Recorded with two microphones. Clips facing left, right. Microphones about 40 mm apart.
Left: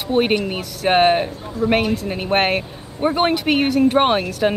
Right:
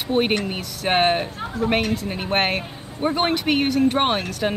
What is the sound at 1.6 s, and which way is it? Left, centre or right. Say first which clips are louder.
Speech: left 3 dB; right.